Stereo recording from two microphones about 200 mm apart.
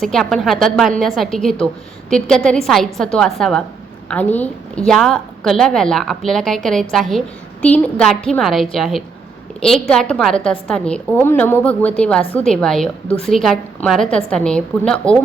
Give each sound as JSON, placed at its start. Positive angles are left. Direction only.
{"t": 0.0, "sound": "a woman's voice", "side_deg": 0}
{"t": 12.2, "sound": "a woman's voice", "side_deg": 30}
{"t": 12.5, "sound": "a woman's voice", "side_deg": 5}